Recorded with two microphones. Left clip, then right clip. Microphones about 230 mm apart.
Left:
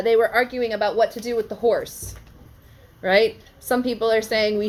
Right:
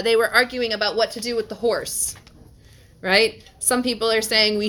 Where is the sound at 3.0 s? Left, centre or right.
Right.